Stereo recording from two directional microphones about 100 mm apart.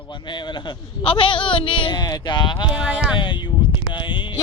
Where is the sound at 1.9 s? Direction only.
45° left (ahead or behind).